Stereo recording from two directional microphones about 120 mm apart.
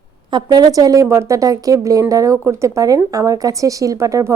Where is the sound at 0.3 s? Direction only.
35° right (ahead or behind).